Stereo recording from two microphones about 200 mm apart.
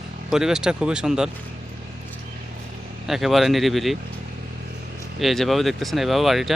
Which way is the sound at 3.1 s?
Centre (ahead or behind).